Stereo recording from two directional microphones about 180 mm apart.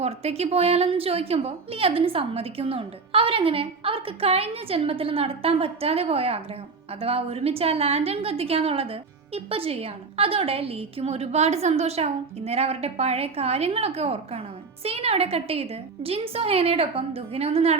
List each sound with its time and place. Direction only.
0.0 s a woman's voice: 35° right (ahead or behind)